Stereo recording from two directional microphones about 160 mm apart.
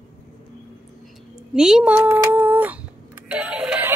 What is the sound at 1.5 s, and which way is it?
Speech, 5° right (ahead or behind).